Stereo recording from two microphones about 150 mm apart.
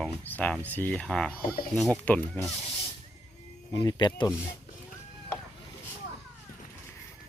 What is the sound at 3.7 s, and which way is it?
Speech, 30° left (ahead or behind).